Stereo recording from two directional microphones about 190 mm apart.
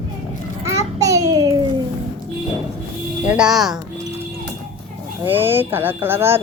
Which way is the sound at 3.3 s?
5° right (ahead or behind).